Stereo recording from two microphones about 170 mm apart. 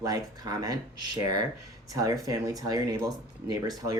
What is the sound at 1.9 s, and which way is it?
Speech, 20° right (ahead or behind).